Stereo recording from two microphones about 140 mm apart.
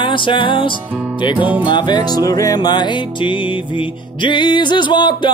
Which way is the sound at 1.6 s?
35° left (ahead or behind).